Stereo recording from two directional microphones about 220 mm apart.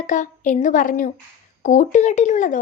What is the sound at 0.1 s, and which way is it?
A woman's voice, 35° left (ahead or behind).